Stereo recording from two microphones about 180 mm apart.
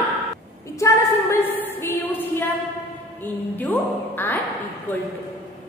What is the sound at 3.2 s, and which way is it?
A woman's voice, 10° left (ahead or behind).